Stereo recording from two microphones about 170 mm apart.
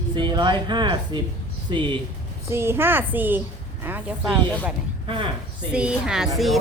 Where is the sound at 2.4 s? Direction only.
15° right (ahead or behind).